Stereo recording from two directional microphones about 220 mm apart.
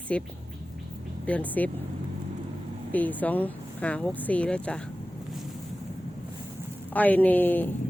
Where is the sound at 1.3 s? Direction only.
5° left (ahead or behind).